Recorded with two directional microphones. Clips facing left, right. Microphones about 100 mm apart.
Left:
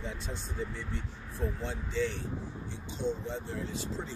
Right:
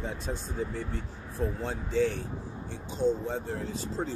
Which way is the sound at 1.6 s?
45° right (ahead or behind).